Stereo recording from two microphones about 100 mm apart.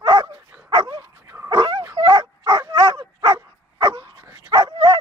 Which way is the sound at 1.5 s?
50° right (ahead or behind).